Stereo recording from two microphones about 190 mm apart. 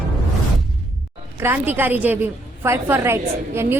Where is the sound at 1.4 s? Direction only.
10° right (ahead or behind).